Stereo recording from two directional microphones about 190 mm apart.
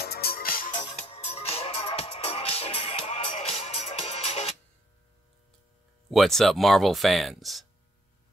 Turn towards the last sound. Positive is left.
turn(degrees=0)  # may be behind; listen again after turning